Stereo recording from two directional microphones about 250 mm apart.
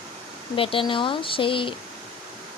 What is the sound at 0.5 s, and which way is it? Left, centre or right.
Speech, left.